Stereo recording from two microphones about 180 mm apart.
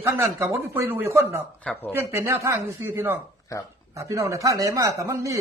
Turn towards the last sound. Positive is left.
turn(degrees=-15)  # may be behind; listen again after turning